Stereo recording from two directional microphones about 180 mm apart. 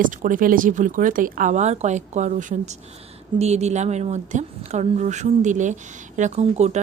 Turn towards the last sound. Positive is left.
turn(degrees=-40)  # may be behind; listen again after turning